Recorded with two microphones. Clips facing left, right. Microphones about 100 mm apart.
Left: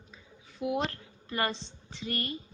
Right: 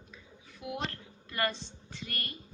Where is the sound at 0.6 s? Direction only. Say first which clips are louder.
Left 7 dB; 20° left (ahead or behind).